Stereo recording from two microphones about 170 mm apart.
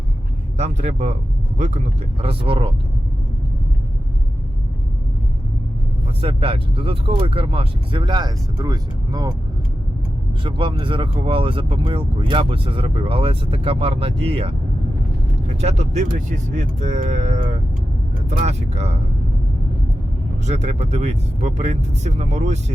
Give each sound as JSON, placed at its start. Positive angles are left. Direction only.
{"t": 0.5, "sound": "speech", "side_deg": -40}
{"t": 2.2, "sound": "speech", "side_deg": -30}
{"t": 6.2, "sound": "speech", "side_deg": -30}
{"t": 10.4, "sound": "speech", "side_deg": -30}
{"t": 15.6, "sound": "speech", "side_deg": -40}
{"t": 20.4, "sound": "speech", "side_deg": -40}